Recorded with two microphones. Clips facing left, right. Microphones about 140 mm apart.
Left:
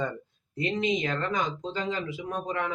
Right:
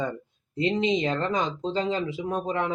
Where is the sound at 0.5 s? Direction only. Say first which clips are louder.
Right 4 dB; 25° right (ahead or behind).